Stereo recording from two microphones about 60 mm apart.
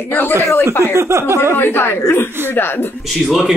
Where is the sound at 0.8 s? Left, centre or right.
Right.